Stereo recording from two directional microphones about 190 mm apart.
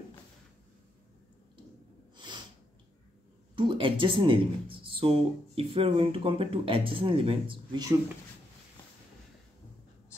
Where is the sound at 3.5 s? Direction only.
25° right (ahead or behind).